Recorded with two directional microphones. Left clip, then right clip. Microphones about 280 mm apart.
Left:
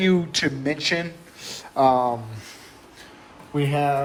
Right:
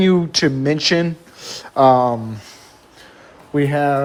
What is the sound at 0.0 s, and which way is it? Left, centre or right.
Speech, right.